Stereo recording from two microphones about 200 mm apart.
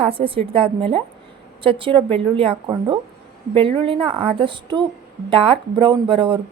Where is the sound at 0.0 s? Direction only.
30° right (ahead or behind).